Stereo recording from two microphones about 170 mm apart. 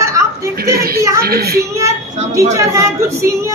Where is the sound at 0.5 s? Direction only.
65° right (ahead or behind).